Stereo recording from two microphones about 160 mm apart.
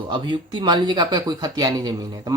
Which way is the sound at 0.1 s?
30° right (ahead or behind).